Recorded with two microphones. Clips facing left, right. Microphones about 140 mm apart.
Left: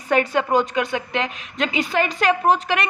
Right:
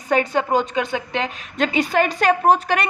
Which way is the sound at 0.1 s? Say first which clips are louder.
Even; 30° right (ahead or behind).